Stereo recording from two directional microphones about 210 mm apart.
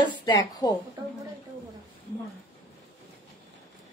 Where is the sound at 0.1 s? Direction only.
20° left (ahead or behind).